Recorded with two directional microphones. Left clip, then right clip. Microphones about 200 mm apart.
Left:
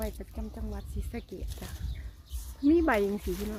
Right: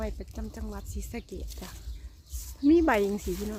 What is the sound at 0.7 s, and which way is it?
Speech, 20° right (ahead or behind).